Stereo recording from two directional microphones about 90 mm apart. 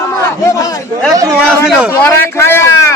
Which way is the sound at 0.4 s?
40° left (ahead or behind).